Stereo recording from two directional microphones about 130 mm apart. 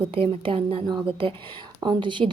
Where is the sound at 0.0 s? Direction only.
45° right (ahead or behind).